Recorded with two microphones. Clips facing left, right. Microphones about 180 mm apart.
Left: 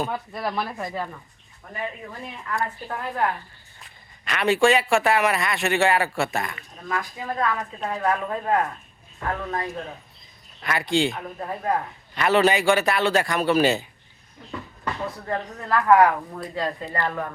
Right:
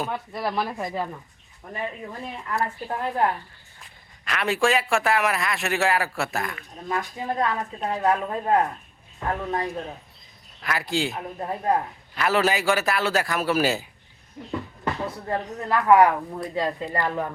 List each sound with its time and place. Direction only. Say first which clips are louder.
0.1 s speech: even; 5° right (ahead or behind)
2.8 s speech: right 3 dB; 30° right (ahead or behind)
4.3 s a man's voice: left 3 dB; centre (ahead or behind)
6.8 s speech: right 1 dB; 20° right (ahead or behind)
10.6 s a man's voice: left 3 dB; centre (ahead or behind)
11.3 s speech: right 3 dB; 20° right (ahead or behind)
12.1 s a man's voice: left 3 dB; centre (ahead or behind)
15.3 s speech: even; 25° right (ahead or behind)